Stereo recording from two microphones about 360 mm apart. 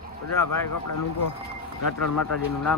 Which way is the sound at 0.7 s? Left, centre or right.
Left.